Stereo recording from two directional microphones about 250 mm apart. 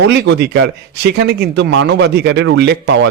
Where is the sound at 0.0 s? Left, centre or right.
Right.